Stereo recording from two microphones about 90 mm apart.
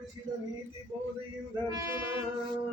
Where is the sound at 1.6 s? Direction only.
40° right (ahead or behind).